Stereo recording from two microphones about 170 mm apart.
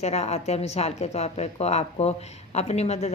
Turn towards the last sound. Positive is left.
turn(degrees=40)  # may be behind; listen again after turning